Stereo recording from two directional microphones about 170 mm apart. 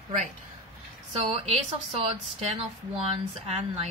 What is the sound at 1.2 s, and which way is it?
Speech, 35° right (ahead or behind).